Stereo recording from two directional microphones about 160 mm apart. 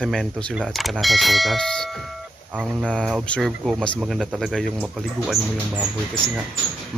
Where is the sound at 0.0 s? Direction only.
5° left (ahead or behind).